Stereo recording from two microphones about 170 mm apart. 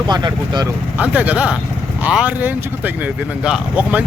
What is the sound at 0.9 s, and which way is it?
Speech, 10° right (ahead or behind).